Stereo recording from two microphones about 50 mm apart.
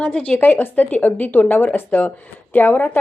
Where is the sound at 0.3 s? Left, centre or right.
Left.